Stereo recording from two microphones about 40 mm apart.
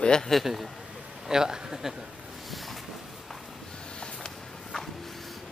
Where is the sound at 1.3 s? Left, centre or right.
Centre.